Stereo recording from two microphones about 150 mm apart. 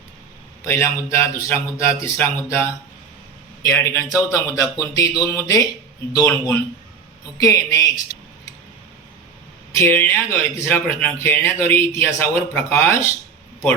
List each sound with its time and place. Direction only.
0.6 s speech: 15° left (ahead or behind)
7.3 s speech: 25° left (ahead or behind)
9.7 s speech: 15° left (ahead or behind)